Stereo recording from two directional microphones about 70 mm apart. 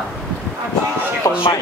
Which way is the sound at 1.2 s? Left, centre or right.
Left.